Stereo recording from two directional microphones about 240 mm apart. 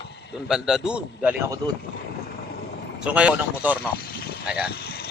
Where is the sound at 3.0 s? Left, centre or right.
Centre.